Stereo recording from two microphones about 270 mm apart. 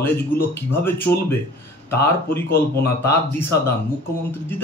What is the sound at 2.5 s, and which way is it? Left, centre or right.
Speech, left.